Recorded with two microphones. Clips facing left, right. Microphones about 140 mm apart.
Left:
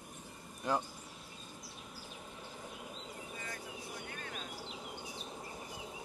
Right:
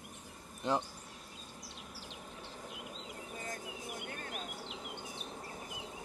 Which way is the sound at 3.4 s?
45° right (ahead or behind).